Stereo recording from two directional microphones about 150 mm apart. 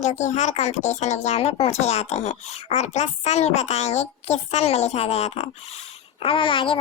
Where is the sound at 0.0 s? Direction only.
50° left (ahead or behind).